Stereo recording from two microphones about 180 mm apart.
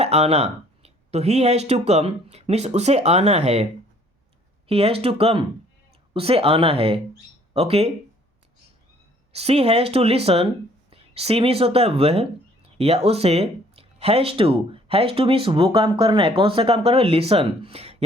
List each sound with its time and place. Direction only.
0.0 s speech: 35° right (ahead or behind)
4.7 s speech: 30° right (ahead or behind)
9.3 s speech: 35° right (ahead or behind)